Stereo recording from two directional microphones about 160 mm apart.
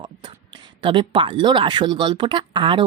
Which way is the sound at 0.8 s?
30° right (ahead or behind).